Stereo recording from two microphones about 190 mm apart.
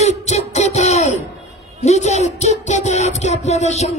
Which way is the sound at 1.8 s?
35° left (ahead or behind).